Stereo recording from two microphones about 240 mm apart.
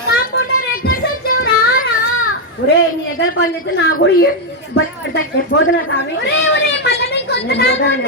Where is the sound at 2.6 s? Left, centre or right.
Left.